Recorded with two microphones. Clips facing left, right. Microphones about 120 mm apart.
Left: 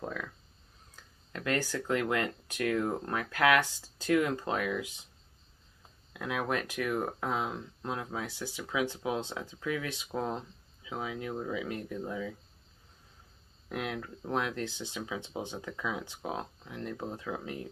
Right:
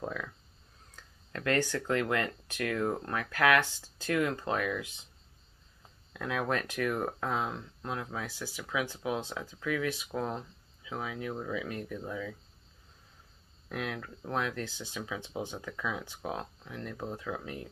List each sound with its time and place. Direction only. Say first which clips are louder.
1.3 s speech: right 2 dB; 20° left (ahead or behind)
6.1 s speech: right 1 dB; 15° left (ahead or behind)
13.7 s speech: left 1 dB; 20° left (ahead or behind)